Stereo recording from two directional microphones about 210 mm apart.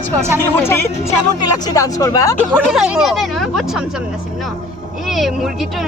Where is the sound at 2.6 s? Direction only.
5° right (ahead or behind).